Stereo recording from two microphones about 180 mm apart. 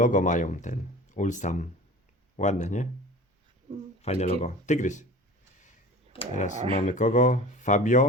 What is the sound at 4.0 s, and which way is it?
Speech, 35° left (ahead or behind).